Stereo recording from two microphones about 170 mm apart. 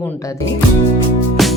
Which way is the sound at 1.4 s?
Centre (ahead or behind).